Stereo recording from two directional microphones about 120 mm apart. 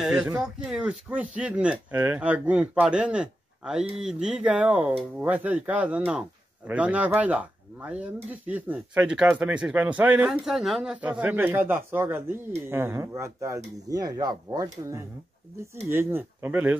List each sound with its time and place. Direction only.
0.0 s speech: 5° right (ahead or behind)